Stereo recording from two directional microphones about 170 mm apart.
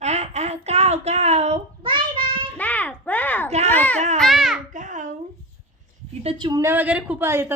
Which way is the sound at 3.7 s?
10° left (ahead or behind).